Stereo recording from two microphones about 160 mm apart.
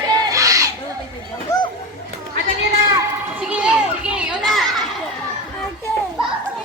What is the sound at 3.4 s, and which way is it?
Children playing, 10° right (ahead or behind).